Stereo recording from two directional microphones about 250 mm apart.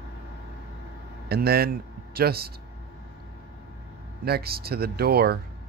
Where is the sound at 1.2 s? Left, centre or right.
Right.